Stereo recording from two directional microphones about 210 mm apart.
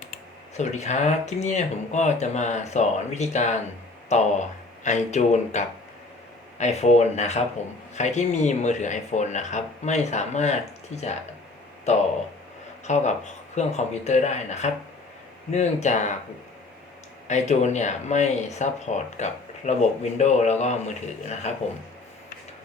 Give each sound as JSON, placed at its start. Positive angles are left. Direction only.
{"t": 0.5, "sound": "speech", "side_deg": 35}
{"t": 17.2, "sound": "speech", "side_deg": 35}